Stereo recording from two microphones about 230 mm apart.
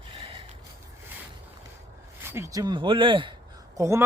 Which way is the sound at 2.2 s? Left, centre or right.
Centre.